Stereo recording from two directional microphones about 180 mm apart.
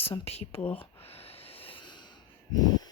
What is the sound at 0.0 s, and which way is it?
Speech, 35° left (ahead or behind).